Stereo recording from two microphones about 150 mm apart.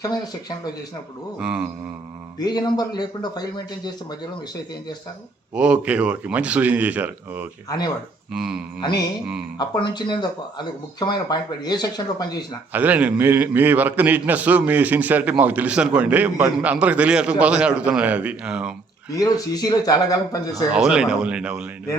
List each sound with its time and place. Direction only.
1.4 s speech: 5° right (ahead or behind)
2.4 s speech: 30° left (ahead or behind)
5.5 s a man's voice: 5° right (ahead or behind)
8.8 s speech: 25° left (ahead or behind)
12.7 s a man's voice: 10° right (ahead or behind)
19.1 s speech: 25° left (ahead or behind)
20.7 s a man's voice: 5° right (ahead or behind)